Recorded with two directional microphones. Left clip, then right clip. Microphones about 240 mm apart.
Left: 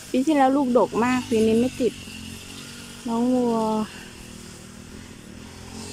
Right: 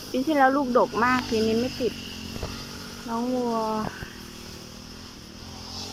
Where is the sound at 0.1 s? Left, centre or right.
Centre.